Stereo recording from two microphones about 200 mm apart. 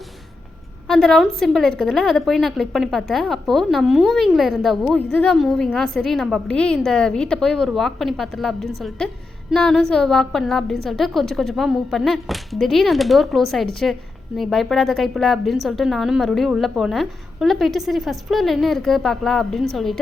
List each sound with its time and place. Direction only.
0.9 s a woman's voice: centre (ahead or behind)